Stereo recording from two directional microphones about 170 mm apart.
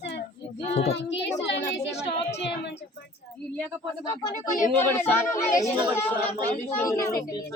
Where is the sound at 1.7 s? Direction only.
90° left.